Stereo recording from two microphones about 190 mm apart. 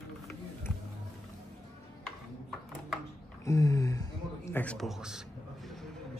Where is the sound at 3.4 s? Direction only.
15° left (ahead or behind); by 5.8 s centre (ahead or behind).